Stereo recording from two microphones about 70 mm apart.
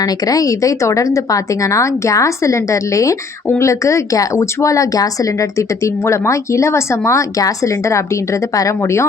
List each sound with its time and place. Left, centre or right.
0.0 s speech: left